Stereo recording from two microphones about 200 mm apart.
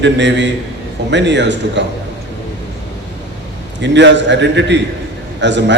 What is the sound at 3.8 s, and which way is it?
A man's voice, 60° right (ahead or behind).